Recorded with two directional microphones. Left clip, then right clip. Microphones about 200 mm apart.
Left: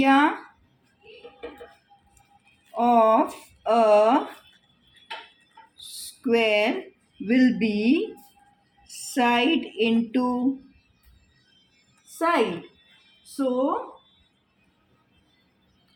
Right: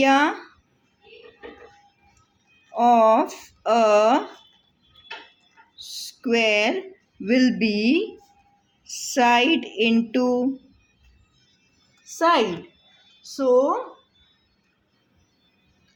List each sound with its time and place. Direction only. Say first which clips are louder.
0.0 s speech: right 1 dB; 25° right (ahead or behind)
2.7 s speech: right 2 dB; 25° right (ahead or behind)
6.0 s speech: right 1 dB; 25° right (ahead or behind)
12.2 s a woman's voice: right 4 dB; 35° right (ahead or behind)